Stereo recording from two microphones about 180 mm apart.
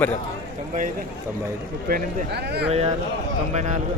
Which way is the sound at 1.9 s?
60° right (ahead or behind).